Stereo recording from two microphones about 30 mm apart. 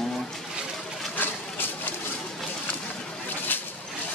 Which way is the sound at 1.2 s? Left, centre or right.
Left.